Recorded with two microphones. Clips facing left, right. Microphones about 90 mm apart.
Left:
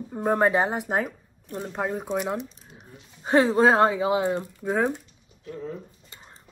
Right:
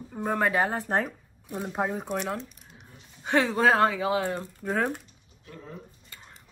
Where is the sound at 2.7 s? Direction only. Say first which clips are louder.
Left 3 dB; 35° left (ahead or behind).